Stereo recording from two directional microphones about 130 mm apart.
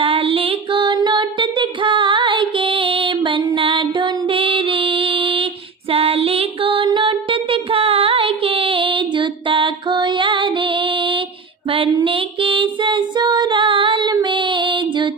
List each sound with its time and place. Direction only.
0.0 s child singing: 45° right (ahead or behind)
5.9 s music: 50° right (ahead or behind)
12.0 s female singing: 40° right (ahead or behind)